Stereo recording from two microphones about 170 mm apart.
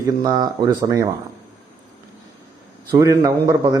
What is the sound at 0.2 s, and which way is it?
Speech, 25° right (ahead or behind).